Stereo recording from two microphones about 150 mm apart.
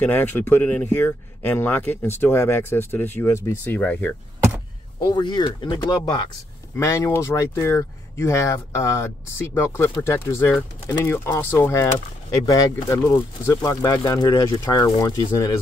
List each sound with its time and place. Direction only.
0.0 s speech: 10° left (ahead or behind)
5.1 s speech: 30° left (ahead or behind)